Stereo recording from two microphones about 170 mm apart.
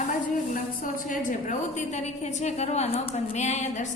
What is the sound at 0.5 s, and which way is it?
A woman's voice, 50° left (ahead or behind).